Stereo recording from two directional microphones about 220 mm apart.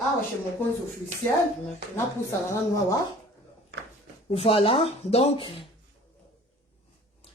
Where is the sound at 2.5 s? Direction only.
15° left (ahead or behind).